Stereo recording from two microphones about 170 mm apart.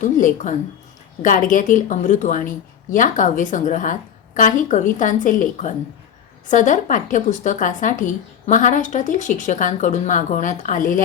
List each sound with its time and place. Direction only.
0.0 s a woman's voice: 50° left (ahead or behind)